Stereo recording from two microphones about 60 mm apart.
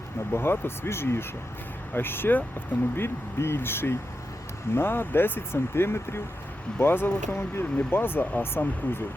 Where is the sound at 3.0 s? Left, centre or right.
Left.